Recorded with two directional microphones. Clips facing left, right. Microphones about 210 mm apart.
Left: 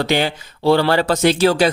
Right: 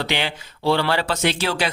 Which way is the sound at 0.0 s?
45° left (ahead or behind).